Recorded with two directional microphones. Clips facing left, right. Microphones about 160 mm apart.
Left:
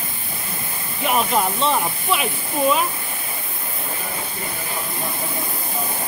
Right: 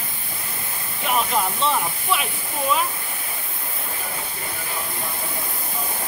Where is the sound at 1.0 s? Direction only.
20° left (ahead or behind).